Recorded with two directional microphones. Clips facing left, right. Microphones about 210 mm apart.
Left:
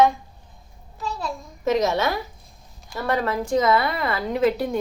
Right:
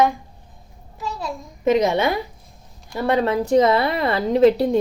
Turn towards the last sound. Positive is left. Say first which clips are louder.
# right 6 dB
turn(degrees=-30)  # may be behind; listen again after turning